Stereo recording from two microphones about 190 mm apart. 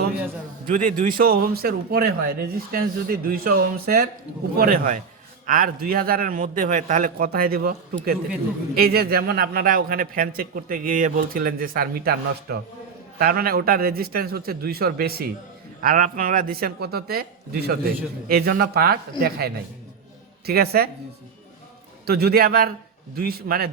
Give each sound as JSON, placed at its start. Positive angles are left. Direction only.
{"t": 0.7, "sound": "a man's voice", "side_deg": -45}
{"t": 8.7, "sound": "a man's voice", "side_deg": -55}
{"t": 22.0, "sound": "a man's voice", "side_deg": -55}